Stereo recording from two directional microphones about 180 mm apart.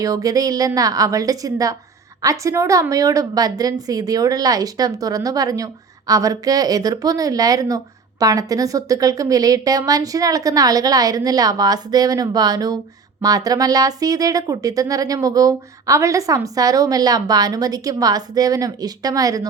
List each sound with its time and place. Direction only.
0.0 s speech: 20° right (ahead or behind)